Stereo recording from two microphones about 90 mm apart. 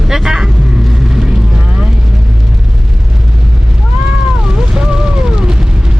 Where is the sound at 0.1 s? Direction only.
5° right (ahead or behind).